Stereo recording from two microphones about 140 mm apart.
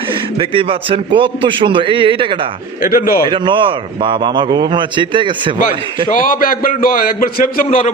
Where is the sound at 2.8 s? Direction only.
90° left.